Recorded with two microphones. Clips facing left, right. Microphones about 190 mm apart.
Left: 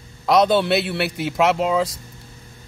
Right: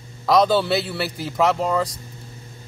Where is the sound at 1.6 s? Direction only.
Centre (ahead or behind).